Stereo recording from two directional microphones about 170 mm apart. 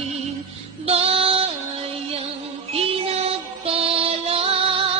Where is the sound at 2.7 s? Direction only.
35° right (ahead or behind).